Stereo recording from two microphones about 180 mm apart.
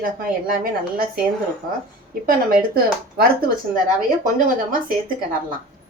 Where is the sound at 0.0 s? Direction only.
50° right (ahead or behind).